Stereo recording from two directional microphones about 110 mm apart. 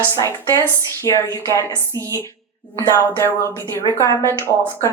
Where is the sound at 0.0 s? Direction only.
25° left (ahead or behind).